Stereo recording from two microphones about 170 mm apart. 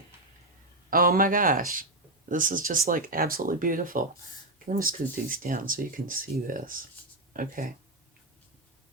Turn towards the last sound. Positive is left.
turn(degrees=-55)  # may be behind; listen again after turning